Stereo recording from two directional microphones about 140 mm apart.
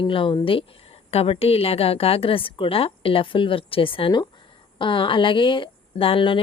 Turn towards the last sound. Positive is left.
turn(degrees=40)  # may be behind; listen again after turning